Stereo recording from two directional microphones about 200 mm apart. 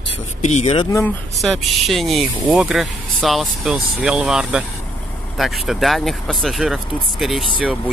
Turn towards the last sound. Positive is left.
turn(degrees=0)  # may be behind; listen again after turning